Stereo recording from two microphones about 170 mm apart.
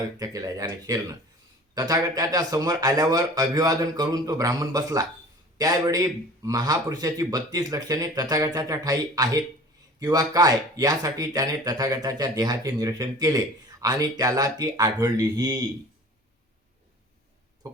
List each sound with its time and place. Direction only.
0.2 s speech: 20° right (ahead or behind)